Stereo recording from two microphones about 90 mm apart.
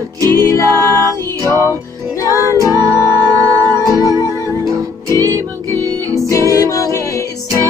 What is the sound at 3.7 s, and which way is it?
Music, 40° left (ahead or behind).